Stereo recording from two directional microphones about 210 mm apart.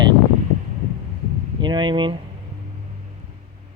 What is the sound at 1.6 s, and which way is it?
Speech, 20° right (ahead or behind).